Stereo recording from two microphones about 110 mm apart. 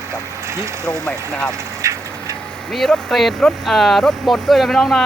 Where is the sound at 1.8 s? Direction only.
30° right (ahead or behind).